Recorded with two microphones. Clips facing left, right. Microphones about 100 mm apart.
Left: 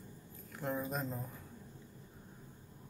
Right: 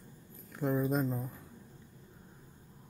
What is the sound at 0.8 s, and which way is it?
Speech, 20° right (ahead or behind).